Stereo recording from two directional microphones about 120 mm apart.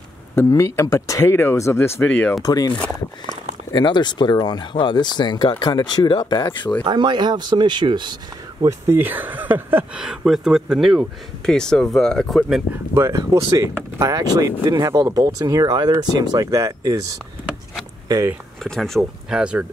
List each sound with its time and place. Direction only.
0.4 s speech: 20° left (ahead or behind)
2.4 s speech: 35° left (ahead or behind)
6.8 s speech: 40° right (ahead or behind)
8.6 s speech: 20° right (ahead or behind); by 12.6 s centre (ahead or behind)
12.9 s speech: 25° right (ahead or behind)
18.6 s speech: centre (ahead or behind)